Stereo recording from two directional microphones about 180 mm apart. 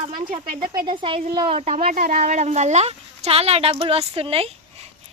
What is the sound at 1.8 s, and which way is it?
Speech, 55° right (ahead or behind).